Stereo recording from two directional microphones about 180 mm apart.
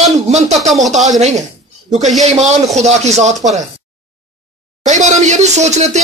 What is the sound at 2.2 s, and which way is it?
Speech, 40° right (ahead or behind).